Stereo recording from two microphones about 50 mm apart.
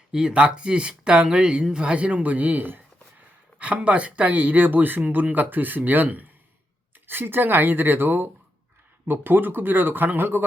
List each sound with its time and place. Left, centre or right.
0.1 s speech: centre; by 10.4 s right